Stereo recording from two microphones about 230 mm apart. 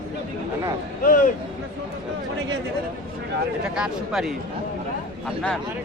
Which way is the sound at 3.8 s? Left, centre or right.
Centre.